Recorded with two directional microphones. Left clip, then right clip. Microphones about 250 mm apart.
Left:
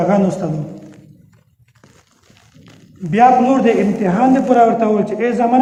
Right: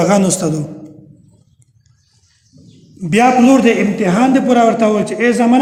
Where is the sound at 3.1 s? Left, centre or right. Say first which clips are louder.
Even; right.